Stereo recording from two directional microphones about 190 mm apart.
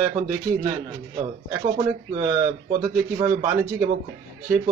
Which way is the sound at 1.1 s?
25° right (ahead or behind).